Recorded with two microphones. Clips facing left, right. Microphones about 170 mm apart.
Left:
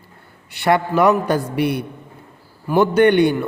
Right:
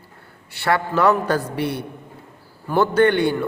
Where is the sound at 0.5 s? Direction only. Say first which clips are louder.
Left 4 dB; 15° left (ahead or behind).